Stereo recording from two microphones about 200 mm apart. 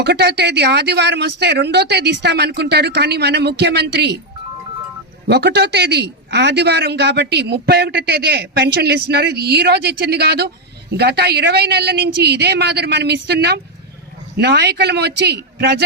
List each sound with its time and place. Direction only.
0.0 s a man's voice: 55° right (ahead or behind)
5.3 s a man's voice: 55° right (ahead or behind)